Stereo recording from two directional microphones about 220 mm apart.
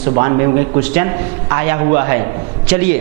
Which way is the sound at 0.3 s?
15° right (ahead or behind).